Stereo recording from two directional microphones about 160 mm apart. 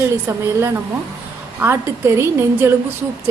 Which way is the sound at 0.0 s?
15° right (ahead or behind).